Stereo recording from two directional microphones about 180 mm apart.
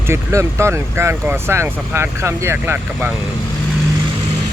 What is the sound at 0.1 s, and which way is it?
Speech, 15° right (ahead or behind).